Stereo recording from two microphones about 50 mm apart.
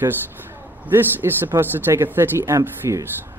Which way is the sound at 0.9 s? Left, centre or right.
Right.